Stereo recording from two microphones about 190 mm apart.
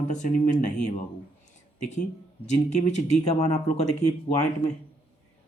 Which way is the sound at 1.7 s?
40° left (ahead or behind).